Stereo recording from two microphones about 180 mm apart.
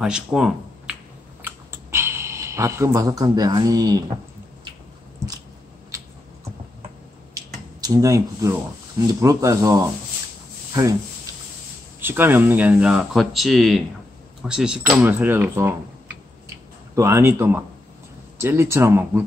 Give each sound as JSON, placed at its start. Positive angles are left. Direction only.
{"t": 0.0, "sound": "speech", "side_deg": -5}
{"t": 1.4, "sound": "clicking", "side_deg": -15}
{"t": 7.3, "sound": "finger snapping", "side_deg": -20}
{"t": 9.0, "sound": "speech", "side_deg": -20}
{"t": 12.0, "sound": "speech", "side_deg": -10}
{"t": 16.9, "sound": "speech", "side_deg": -15}